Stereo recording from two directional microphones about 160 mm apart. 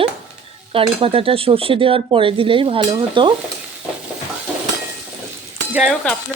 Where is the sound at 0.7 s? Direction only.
35° right (ahead or behind).